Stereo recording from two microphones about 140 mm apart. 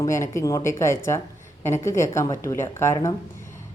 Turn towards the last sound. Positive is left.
turn(degrees=20)  # may be behind; listen again after turning